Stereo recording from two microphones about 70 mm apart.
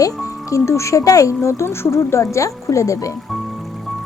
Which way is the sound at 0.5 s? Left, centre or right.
Left.